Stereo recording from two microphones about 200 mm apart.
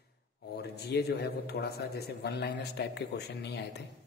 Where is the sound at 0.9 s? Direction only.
55° left (ahead or behind).